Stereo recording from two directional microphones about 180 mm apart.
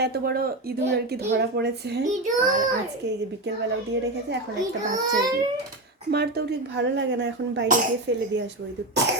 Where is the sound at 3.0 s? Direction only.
70° right (ahead or behind).